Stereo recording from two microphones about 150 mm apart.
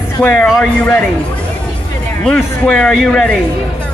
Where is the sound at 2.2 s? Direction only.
5° left (ahead or behind).